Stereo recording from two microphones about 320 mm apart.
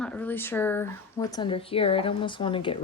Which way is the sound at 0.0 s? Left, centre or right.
Centre.